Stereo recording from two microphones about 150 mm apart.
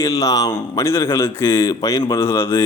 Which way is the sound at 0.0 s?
20° left (ahead or behind).